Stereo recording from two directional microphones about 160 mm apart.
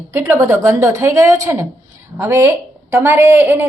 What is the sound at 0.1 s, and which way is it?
A woman's voice, 15° right (ahead or behind).